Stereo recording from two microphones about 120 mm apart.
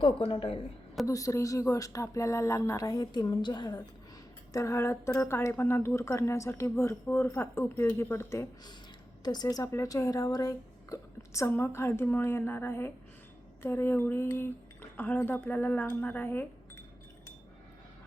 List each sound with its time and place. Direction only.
0.0 s speech: 50° left (ahead or behind)
1.0 s speech: 25° left (ahead or behind)
4.5 s speech: 25° left (ahead or behind)
9.2 s speech: 35° left (ahead or behind); by 16.5 s 15° left (ahead or behind)